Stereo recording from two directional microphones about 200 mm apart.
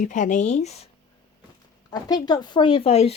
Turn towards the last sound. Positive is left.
turn(degrees=30)  # may be behind; listen again after turning